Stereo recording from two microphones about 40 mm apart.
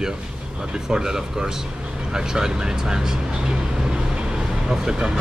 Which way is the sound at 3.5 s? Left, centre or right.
Centre.